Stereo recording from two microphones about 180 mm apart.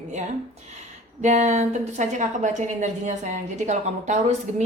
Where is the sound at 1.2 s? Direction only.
40° right (ahead or behind).